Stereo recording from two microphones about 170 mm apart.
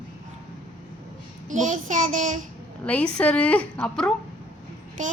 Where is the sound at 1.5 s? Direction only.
50° right (ahead or behind).